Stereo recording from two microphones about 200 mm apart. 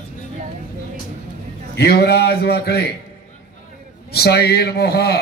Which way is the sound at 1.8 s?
55° left (ahead or behind).